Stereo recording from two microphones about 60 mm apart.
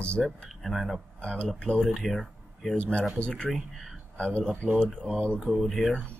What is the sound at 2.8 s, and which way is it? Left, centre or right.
Speech, left.